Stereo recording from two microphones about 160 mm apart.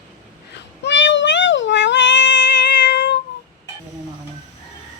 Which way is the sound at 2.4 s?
90° left.